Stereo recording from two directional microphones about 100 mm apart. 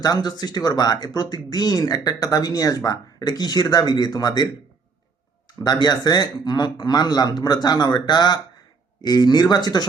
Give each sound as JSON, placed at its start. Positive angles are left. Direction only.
{"t": 0.0, "sound": "speech", "side_deg": 40}
{"t": 5.5, "sound": "a man's voice", "side_deg": 45}